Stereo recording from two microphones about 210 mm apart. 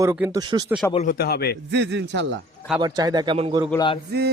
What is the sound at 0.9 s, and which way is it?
Speech, 40° left (ahead or behind).